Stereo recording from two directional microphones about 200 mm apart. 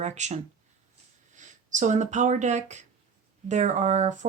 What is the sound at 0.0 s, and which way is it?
Speech, 35° right (ahead or behind).